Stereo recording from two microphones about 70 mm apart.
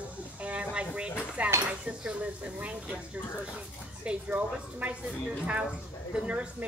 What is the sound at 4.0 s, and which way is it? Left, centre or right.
Speech, centre.